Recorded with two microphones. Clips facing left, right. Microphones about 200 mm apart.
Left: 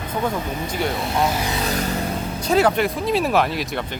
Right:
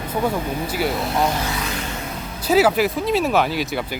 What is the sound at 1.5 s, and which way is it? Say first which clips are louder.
Music: left 4 dB; 40° left (ahead or behind).